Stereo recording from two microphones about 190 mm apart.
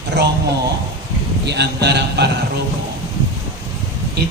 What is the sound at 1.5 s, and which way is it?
Speech, 60° right (ahead or behind).